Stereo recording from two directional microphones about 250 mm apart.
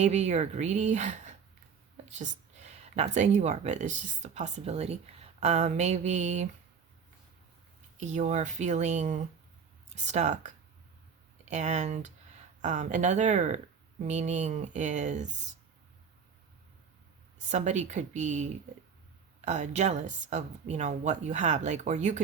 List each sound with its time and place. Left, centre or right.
0.0 s speech: right
7.9 s speech: right
17.3 s speech: right